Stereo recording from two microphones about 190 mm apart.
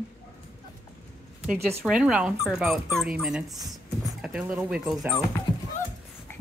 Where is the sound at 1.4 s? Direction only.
10° right (ahead or behind).